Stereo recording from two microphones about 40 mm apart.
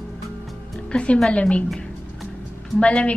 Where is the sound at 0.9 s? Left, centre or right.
Left.